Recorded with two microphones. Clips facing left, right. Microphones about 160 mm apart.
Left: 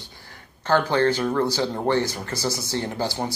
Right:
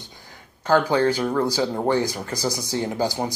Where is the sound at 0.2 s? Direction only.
10° right (ahead or behind).